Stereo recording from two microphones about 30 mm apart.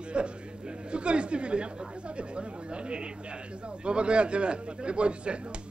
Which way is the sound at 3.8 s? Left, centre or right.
Right.